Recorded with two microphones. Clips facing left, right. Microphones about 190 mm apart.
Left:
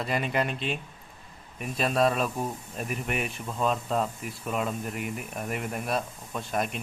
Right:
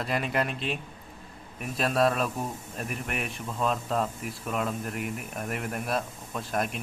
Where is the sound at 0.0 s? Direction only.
Centre (ahead or behind).